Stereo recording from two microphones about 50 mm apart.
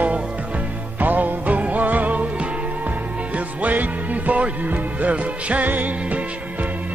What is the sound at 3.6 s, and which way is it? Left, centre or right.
Music, right.